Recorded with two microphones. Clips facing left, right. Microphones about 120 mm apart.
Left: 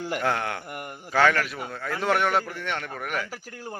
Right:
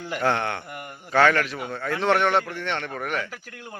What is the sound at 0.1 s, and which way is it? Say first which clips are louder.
A man's voice: right 4 dB; 5° left (ahead or behind).